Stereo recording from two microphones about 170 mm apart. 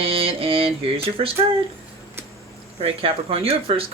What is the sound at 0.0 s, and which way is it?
Mantra, 35° right (ahead or behind).